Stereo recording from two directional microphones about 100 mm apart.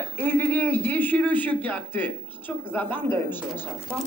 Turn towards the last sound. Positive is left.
turn(degrees=20)  # may be behind; listen again after turning